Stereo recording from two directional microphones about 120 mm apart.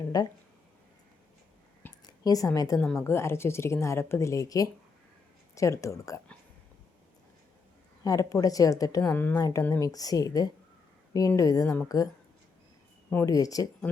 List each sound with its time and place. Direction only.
0.0 s speech: 35° left (ahead or behind)
2.0 s a sound: 30° left (ahead or behind)
2.6 s speech: 30° left (ahead or behind)
8.0 s speech: 30° left (ahead or behind)
9.1 s speech: 15° left (ahead or behind)
9.4 s a woman's voice: 30° left (ahead or behind)
13.2 s speech: 30° left (ahead or behind)